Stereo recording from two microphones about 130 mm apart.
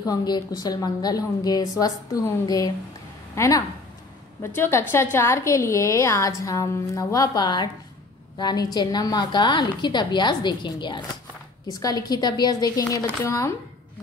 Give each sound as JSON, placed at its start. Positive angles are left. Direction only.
{"t": 0.0, "sound": "a woman's voice", "side_deg": 30}